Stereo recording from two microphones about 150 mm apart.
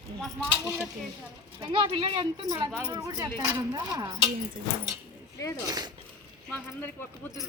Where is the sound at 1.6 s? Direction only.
35° right (ahead or behind).